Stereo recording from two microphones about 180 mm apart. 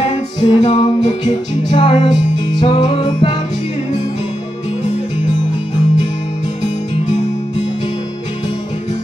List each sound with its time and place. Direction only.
0.0 s music: 35° left (ahead or behind)